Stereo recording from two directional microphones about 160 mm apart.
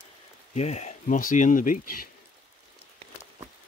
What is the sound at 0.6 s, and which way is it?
Speech, 45° left (ahead or behind).